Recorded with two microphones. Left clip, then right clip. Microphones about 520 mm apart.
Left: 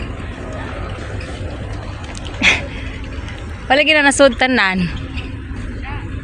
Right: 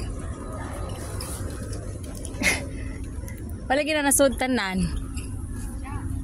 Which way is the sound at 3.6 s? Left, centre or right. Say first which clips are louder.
Left 11 dB; right.